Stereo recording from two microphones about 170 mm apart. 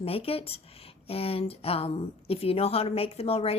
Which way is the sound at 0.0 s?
35° left (ahead or behind).